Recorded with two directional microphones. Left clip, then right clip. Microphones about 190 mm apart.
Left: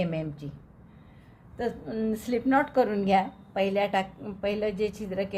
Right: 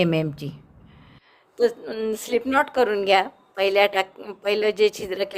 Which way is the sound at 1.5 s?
45° right (ahead or behind).